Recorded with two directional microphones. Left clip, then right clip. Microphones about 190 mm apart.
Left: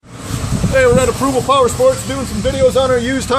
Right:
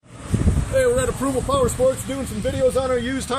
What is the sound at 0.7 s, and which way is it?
Speech, 40° right (ahead or behind).